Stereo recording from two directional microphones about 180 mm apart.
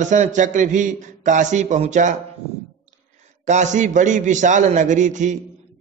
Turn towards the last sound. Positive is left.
turn(degrees=-45)  # may be behind; listen again after turning